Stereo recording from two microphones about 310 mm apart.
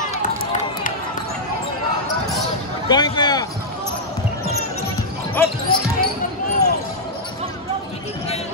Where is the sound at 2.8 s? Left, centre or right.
Centre.